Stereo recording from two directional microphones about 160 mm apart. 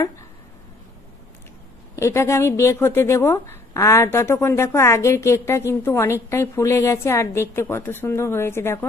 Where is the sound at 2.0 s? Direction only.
20° left (ahead or behind).